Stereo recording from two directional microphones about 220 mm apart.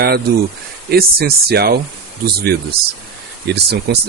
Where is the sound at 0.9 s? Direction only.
45° right (ahead or behind).